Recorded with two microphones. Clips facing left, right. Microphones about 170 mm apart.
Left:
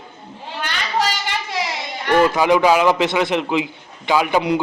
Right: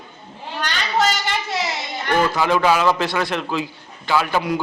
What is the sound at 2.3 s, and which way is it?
A man's voice, 15° left (ahead or behind).